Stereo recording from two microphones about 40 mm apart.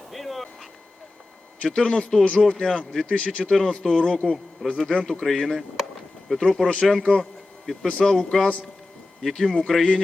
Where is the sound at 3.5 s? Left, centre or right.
Centre.